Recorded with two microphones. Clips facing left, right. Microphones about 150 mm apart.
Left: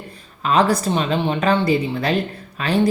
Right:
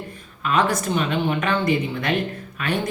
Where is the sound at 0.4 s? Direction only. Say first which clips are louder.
Left 4 dB; 35° left (ahead or behind).